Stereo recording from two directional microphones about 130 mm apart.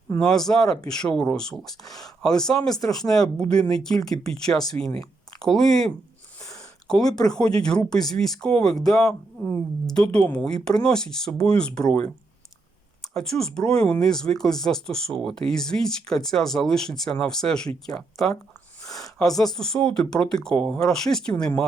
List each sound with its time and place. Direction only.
0.2 s speech: 5° left (ahead or behind)
6.4 s a sound: 25° left (ahead or behind)
6.8 s speech: 5° left (ahead or behind)
13.1 s speech: 5° left (ahead or behind)
19.4 s speech: 5° left (ahead or behind)